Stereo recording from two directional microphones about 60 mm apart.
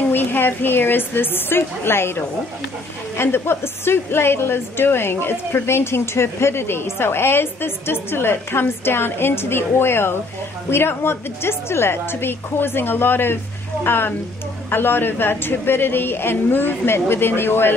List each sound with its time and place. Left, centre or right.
0.1 s a woman's voice: left